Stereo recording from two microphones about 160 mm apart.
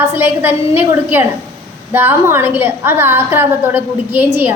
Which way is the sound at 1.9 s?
15° right (ahead or behind).